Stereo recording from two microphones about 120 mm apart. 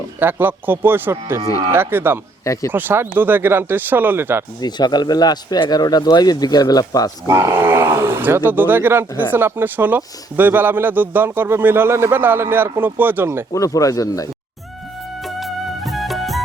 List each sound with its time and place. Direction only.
0.2 s speech: 15° right (ahead or behind)
2.4 s speech: 25° left (ahead or behind)
2.7 s speech: 15° right (ahead or behind)
4.6 s speech: 35° left (ahead or behind)
7.3 s speech: 20° right (ahead or behind)
13.5 s speech: 25° left (ahead or behind)
15.2 s music: centre (ahead or behind)